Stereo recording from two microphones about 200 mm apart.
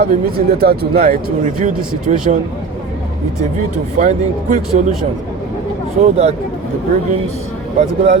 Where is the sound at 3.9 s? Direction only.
40° right (ahead or behind).